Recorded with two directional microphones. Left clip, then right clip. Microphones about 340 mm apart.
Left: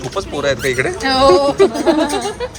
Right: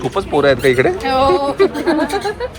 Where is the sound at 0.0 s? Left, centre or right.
Centre.